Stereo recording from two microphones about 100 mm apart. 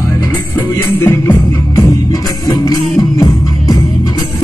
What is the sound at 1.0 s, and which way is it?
Music, 25° left (ahead or behind).